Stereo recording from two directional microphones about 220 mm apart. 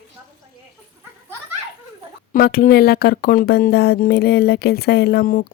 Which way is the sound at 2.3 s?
40° left (ahead or behind).